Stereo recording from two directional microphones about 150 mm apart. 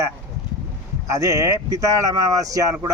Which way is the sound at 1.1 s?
20° right (ahead or behind).